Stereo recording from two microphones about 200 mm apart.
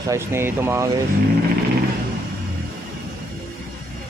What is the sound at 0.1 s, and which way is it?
Speech, 10° right (ahead or behind).